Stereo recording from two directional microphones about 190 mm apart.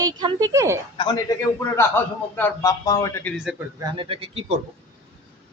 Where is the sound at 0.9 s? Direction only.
20° left (ahead or behind).